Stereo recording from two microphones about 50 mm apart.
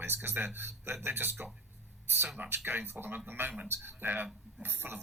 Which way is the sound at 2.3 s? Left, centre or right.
Right.